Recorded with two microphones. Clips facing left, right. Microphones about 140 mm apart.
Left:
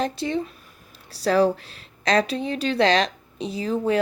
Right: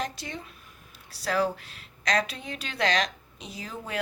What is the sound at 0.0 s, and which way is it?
Speech, 30° left (ahead or behind).